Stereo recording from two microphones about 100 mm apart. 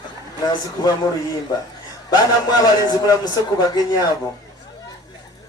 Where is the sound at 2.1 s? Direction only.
45° left (ahead or behind).